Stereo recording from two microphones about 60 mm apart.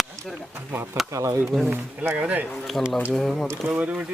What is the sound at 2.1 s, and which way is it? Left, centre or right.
Speech, right.